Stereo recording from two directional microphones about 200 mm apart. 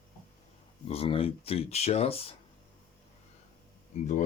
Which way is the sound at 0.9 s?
30° left (ahead or behind).